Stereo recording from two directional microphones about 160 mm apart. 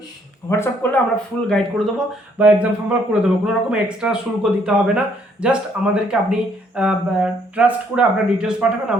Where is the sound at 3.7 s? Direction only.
5° right (ahead or behind).